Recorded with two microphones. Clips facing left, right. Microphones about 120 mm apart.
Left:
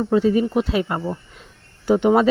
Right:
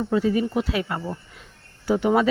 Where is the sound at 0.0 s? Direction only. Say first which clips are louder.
Left 4 dB; 25° left (ahead or behind).